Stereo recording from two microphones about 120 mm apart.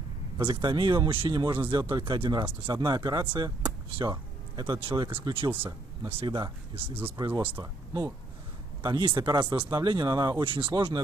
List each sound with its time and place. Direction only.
0.5 s speech: 40° right (ahead or behind)
8.8 s speech: 40° right (ahead or behind)